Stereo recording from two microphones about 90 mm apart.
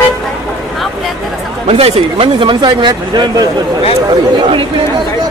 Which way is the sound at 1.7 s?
90° right.